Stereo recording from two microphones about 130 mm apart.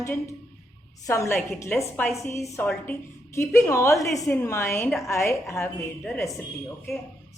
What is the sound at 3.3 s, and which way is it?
A woman's voice, 20° left (ahead or behind).